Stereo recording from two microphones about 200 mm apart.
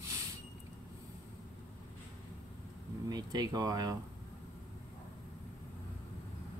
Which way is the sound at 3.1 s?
20° right (ahead or behind).